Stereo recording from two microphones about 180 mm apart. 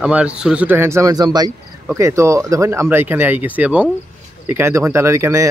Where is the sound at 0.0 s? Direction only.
5° right (ahead or behind).